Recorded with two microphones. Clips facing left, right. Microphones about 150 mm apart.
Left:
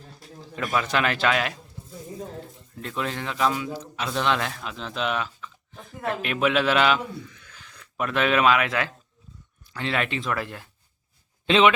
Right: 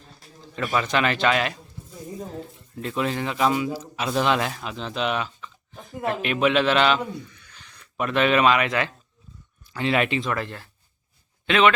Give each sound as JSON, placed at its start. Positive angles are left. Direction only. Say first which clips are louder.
{"t": 0.5, "sound": "speech", "louder": "right 1 dB", "side_deg": 0}
{"t": 2.8, "sound": "speech", "louder": "right 4 dB", "side_deg": -5}
{"t": 7.3, "sound": "a sound", "louder": "left 4 dB", "side_deg": 90}
{"t": 7.9, "sound": "speech", "louder": "right 2 dB", "side_deg": 0}
{"t": 11.4, "sound": "a man's voice", "louder": "left 1 dB", "side_deg": 25}